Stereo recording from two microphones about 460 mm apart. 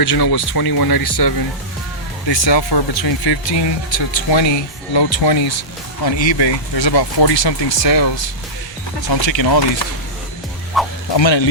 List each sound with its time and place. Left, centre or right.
0.0 s speech: left
2.3 s speech: left
10.8 s music: centre
11.1 s speech: left